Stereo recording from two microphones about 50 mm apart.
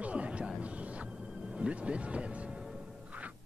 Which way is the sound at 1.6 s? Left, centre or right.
Right.